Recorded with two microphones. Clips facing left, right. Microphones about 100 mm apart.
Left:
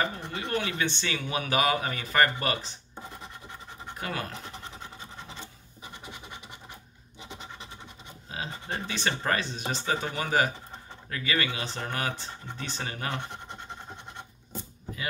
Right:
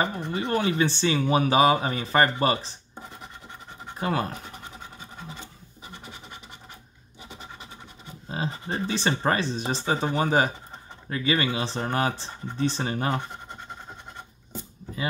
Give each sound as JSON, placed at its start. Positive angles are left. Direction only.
{"t": 0.0, "sound": "speech", "side_deg": -30}
{"t": 4.0, "sound": "speech", "side_deg": -30}
{"t": 8.3, "sound": "speech", "side_deg": -30}